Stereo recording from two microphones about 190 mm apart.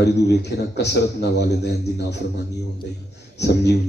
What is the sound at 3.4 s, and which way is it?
Speech, 60° left (ahead or behind).